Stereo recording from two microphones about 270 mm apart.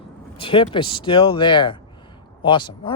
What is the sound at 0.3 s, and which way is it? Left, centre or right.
Speech, centre.